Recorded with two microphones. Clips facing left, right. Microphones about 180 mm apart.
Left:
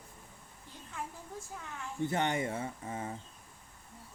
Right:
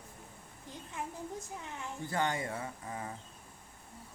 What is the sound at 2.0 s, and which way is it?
Speech, 20° left (ahead or behind).